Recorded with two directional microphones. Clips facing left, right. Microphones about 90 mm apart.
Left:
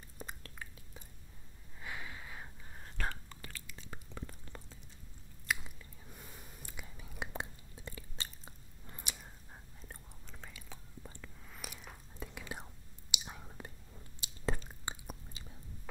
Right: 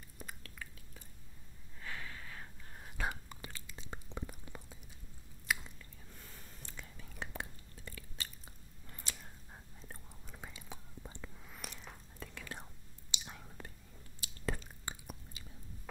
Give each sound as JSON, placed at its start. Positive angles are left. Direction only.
{"t": 0.2, "sound": "chewing", "side_deg": 30}
{"t": 1.8, "sound": "a sound", "side_deg": 15}
{"t": 3.0, "sound": "whispering", "side_deg": -15}
{"t": 5.5, "sound": "chewing", "side_deg": 0}
{"t": 6.0, "sound": "whispering", "side_deg": 15}
{"t": 9.5, "sound": "whispering", "side_deg": 0}
{"t": 11.4, "sound": "whispering", "side_deg": 0}
{"t": 14.2, "sound": "chewing", "side_deg": 20}